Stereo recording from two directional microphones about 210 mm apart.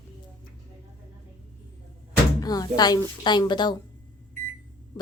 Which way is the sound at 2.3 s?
20° left (ahead or behind).